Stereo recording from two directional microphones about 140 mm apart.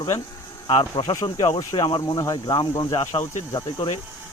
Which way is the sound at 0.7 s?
40° left (ahead or behind).